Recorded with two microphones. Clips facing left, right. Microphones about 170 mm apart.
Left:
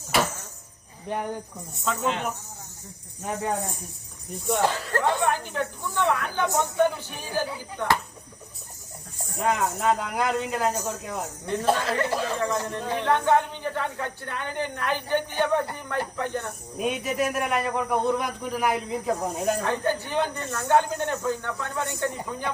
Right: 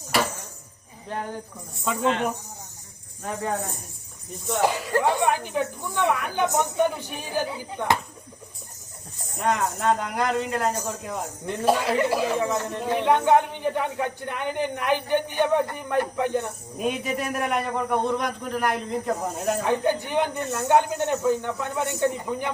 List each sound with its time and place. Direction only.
1.0 s speech: 15° left (ahead or behind)
1.8 s speech: 10° right (ahead or behind)
4.6 s speech: 10° right (ahead or behind)
9.4 s a man's voice: centre (ahead or behind)
11.4 s speech: 10° right (ahead or behind)
16.7 s a man's voice: centre (ahead or behind)
19.6 s speech: 15° right (ahead or behind)